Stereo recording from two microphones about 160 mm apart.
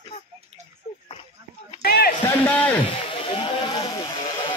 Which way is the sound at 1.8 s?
75° left (ahead or behind).